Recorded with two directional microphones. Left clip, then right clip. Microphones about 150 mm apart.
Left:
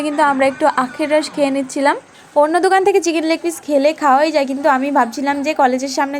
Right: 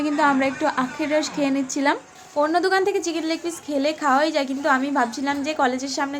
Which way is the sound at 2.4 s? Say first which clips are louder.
Left 7 dB; 40° left (ahead or behind).